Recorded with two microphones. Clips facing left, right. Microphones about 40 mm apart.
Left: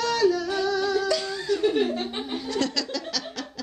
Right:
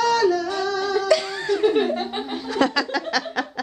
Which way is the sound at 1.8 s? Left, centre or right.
Right.